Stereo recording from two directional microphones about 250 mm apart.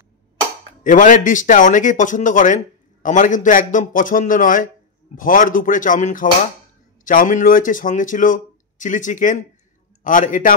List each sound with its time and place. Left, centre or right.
0.8 s speech: left